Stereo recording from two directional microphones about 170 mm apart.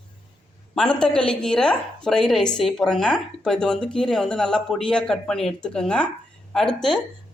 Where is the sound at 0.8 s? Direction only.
5° left (ahead or behind).